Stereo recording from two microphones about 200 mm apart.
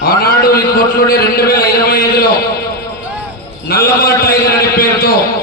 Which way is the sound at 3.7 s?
50° left (ahead or behind).